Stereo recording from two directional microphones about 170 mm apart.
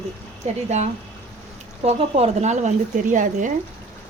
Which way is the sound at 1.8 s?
40° right (ahead or behind).